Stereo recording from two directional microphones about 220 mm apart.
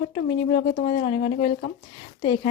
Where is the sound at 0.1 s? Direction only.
25° left (ahead or behind).